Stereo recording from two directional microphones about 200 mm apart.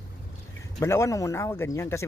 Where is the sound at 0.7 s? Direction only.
15° left (ahead or behind).